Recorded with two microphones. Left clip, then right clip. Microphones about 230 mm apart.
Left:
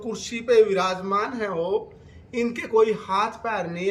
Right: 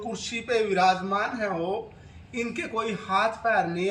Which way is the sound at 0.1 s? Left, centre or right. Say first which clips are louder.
Left 7 dB; centre.